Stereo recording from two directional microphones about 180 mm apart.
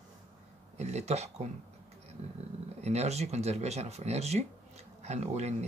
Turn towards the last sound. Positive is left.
turn(degrees=-40)  # may be behind; listen again after turning